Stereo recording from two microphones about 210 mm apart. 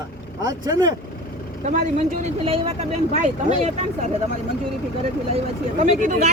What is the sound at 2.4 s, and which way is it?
Speech, 25° right (ahead or behind).